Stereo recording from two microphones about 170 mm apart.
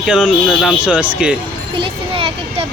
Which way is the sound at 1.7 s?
30° right (ahead or behind).